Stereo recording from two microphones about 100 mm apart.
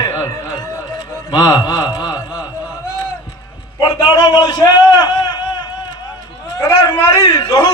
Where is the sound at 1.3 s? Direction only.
45° left (ahead or behind).